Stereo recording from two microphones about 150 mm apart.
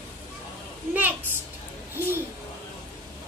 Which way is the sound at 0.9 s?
10° right (ahead or behind).